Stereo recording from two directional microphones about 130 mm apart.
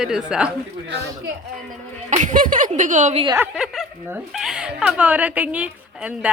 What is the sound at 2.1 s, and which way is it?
Speech, 80° right.